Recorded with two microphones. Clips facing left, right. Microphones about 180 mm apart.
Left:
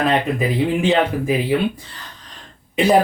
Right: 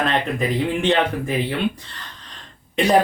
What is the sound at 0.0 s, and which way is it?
Speech, 5° left (ahead or behind).